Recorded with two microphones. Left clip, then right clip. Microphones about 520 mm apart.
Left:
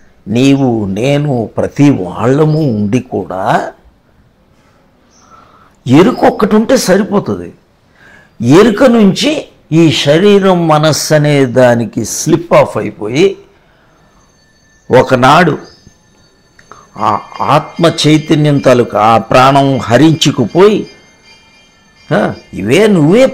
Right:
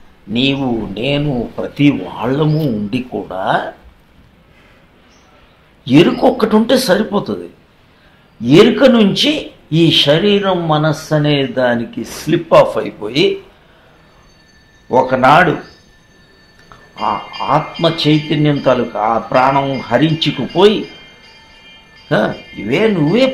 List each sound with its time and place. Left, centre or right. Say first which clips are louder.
0.3 s speech: left 6 dB; left
5.9 s speech: left 3 dB; left
8.4 s speech: left 2 dB; left
14.9 s speech: left 4 dB; left
16.6 s speech: left 5 dB; left
22.0 s speech: left 3 dB; left